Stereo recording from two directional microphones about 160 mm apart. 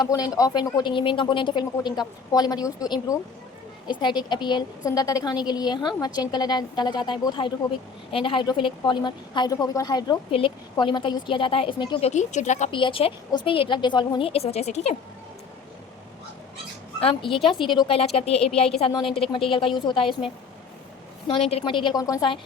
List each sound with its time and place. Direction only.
0.0 s a woman's voice: 25° left (ahead or behind); by 12.7 s 45° left (ahead or behind)
12.7 s a woman's voice: 30° left (ahead or behind)
17.0 s a woman's voice: 35° left (ahead or behind)
21.6 s speech: 30° left (ahead or behind)